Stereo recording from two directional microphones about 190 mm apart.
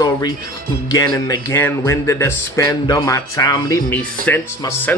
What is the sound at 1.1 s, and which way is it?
Speech, 15° left (ahead or behind).